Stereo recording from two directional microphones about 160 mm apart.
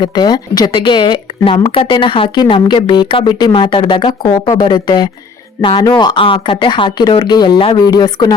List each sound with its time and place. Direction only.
0.0 s speech: 25° left (ahead or behind)